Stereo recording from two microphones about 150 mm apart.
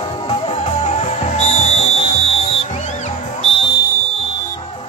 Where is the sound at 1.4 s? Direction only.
50° left (ahead or behind).